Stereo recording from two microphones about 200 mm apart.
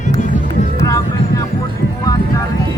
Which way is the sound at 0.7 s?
15° left (ahead or behind).